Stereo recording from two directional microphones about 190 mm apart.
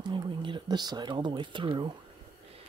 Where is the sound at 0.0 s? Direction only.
25° right (ahead or behind).